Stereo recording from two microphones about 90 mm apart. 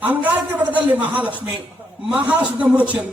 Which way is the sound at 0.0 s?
20° right (ahead or behind).